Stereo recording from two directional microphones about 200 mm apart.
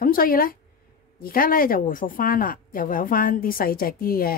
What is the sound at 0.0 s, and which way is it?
A woman's voice, 45° left (ahead or behind).